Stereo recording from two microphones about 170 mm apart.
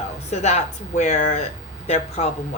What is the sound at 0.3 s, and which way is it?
Speech, 40° left (ahead or behind).